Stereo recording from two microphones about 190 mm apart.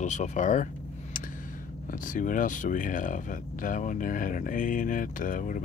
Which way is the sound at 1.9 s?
45° left (ahead or behind).